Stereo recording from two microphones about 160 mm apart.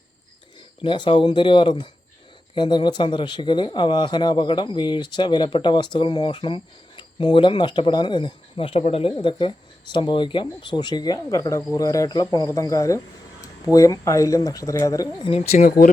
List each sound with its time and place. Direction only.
0.8 s speech: 30° left (ahead or behind)
15.4 s speech: 45° left (ahead or behind)